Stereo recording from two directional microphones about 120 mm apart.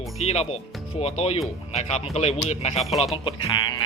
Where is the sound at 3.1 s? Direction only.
45° left (ahead or behind).